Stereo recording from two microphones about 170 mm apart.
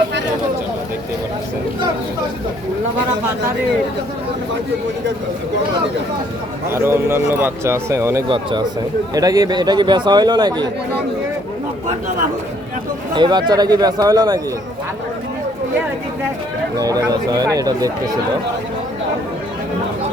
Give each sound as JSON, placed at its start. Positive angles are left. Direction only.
{"t": 6.7, "sound": "a man's voice", "side_deg": -15}
{"t": 8.3, "sound": "a man's voice", "side_deg": -25}
{"t": 13.1, "sound": "a man's voice", "side_deg": -25}
{"t": 16.8, "sound": "a man's voice", "side_deg": -20}